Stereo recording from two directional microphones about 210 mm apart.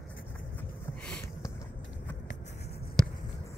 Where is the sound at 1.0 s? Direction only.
5° left (ahead or behind).